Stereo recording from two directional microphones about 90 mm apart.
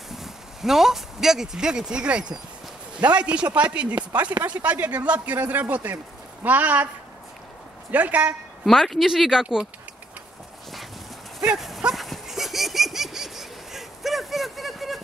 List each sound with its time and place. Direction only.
0.1 s speech: 5° right (ahead or behind)
7.9 s speech: 15° right (ahead or behind)
8.6 s speech: centre (ahead or behind)
11.4 s dog: 5° right (ahead or behind)